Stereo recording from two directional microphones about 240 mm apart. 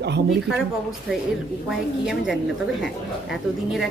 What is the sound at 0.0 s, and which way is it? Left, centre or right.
Speech, right.